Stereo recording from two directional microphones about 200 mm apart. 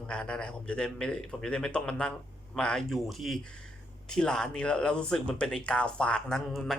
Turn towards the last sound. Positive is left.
turn(degrees=0)  # may be behind; listen again after turning